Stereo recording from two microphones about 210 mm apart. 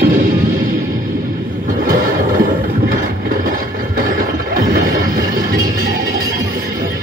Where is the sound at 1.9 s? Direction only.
40° right (ahead or behind).